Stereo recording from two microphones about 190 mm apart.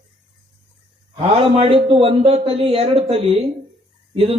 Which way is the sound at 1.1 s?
30° right (ahead or behind).